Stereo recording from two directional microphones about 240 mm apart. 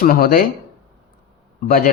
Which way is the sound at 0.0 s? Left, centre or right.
Left.